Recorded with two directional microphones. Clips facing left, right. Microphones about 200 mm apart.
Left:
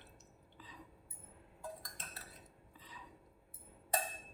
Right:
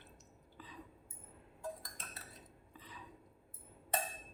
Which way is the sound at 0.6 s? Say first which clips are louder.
Right 3 dB; 60° right (ahead or behind).